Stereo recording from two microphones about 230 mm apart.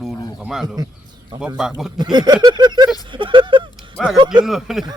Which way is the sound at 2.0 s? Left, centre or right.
Centre.